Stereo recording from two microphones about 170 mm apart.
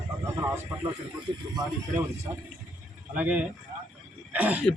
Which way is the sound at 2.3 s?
15° right (ahead or behind).